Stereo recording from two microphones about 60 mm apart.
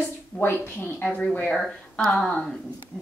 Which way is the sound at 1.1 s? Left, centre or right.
Centre.